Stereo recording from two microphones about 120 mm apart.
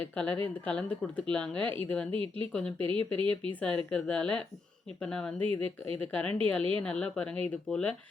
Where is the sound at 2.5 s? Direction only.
5° left (ahead or behind).